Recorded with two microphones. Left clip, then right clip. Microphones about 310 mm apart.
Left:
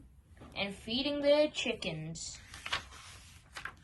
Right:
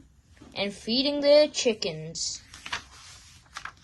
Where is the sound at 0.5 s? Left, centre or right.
Right.